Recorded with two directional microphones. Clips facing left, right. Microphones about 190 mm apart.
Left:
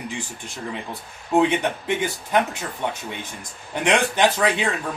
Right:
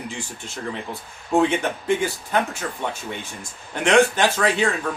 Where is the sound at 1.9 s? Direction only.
20° left (ahead or behind).